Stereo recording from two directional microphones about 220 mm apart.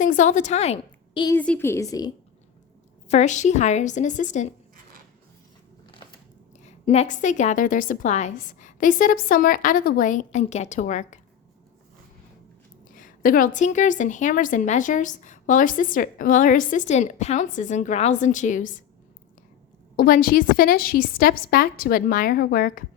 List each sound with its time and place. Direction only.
0.0 s a woman's voice: 35° left (ahead or behind)
1.4 s a woman's voice: 10° left (ahead or behind)
3.1 s a woman's voice: 35° left (ahead or behind)
6.8 s a woman's voice: 30° left (ahead or behind)
12.9 s a woman's voice: 40° left (ahead or behind)
20.0 s a woman's voice: 40° left (ahead or behind)